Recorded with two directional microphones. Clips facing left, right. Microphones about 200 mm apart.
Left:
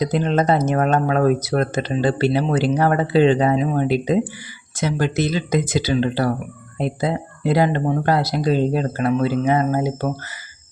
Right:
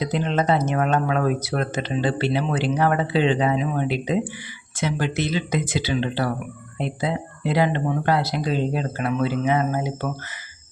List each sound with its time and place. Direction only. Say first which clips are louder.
0.0 s speech: left 4 dB; 45° left (ahead or behind)